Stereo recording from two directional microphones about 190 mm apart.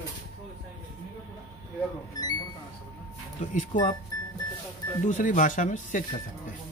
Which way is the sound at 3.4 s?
40° left (ahead or behind).